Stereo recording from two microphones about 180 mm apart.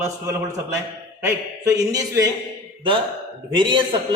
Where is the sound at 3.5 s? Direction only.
25° right (ahead or behind).